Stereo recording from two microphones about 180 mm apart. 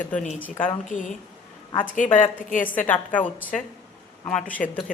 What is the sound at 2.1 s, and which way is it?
Speech, 45° left (ahead or behind).